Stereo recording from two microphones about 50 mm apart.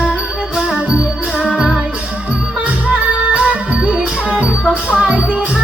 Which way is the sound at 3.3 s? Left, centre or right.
Right.